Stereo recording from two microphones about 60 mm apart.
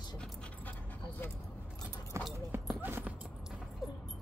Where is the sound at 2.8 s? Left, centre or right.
Right.